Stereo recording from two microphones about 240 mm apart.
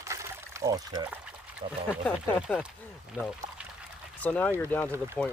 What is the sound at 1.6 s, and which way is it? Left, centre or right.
Speech, right.